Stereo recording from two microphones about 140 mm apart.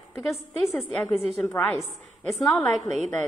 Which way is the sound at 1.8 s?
Centre (ahead or behind).